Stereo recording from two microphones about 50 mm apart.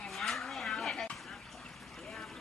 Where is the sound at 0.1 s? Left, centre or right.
Centre.